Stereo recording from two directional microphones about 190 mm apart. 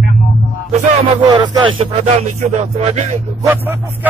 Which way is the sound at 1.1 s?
25° right (ahead or behind).